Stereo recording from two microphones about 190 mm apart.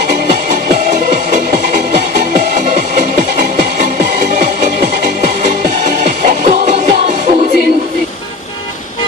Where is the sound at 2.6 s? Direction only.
40° right (ahead or behind).